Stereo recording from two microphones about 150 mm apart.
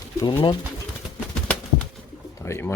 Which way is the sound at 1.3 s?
5° left (ahead or behind).